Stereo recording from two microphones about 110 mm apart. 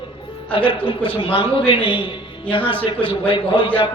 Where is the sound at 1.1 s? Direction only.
50° left (ahead or behind).